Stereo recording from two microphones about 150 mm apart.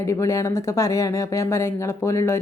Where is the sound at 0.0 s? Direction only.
20° left (ahead or behind).